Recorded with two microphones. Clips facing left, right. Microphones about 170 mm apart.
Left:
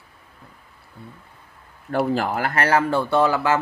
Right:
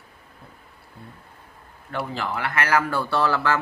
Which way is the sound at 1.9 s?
45° left (ahead or behind).